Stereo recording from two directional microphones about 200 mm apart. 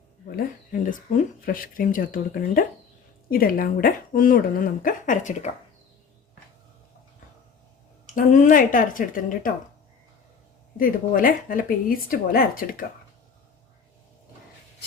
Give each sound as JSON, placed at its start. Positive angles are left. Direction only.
{"t": 0.3, "sound": "speech", "side_deg": 40}
{"t": 8.0, "sound": "speech", "side_deg": 40}
{"t": 10.8, "sound": "speech", "side_deg": 45}